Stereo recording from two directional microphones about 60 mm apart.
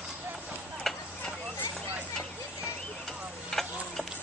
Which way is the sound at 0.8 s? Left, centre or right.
Centre.